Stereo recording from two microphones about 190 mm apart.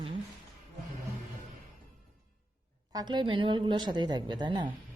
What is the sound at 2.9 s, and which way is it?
A woman's voice, 20° right (ahead or behind).